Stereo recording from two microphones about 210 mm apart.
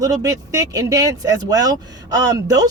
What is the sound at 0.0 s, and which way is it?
Speech, 15° right (ahead or behind).